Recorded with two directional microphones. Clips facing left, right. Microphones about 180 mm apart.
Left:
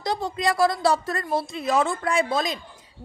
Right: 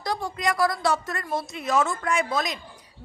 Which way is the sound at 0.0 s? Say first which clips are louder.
Left 2 dB; 25° left (ahead or behind).